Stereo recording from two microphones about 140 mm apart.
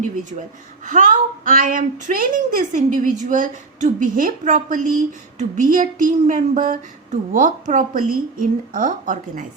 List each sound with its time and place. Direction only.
0.0 s a woman's voice: 65° right (ahead or behind)